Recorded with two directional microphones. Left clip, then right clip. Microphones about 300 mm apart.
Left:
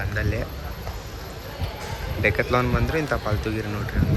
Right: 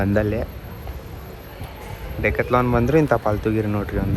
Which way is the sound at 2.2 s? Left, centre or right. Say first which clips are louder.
Right 2 dB; centre.